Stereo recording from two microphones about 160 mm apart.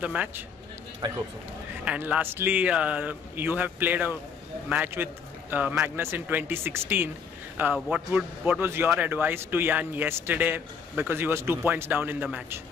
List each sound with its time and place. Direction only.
0.0 s a man's voice: 10° right (ahead or behind)
1.0 s speech: 25° right (ahead or behind)
1.9 s a man's voice: 10° right (ahead or behind)